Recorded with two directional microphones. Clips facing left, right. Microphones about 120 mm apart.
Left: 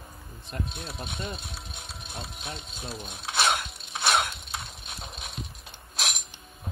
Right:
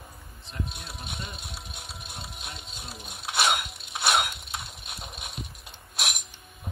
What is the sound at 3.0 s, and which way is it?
Mechanisms, 5° right (ahead or behind).